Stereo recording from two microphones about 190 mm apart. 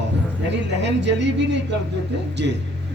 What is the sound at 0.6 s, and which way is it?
A man's voice, 65° right (ahead or behind).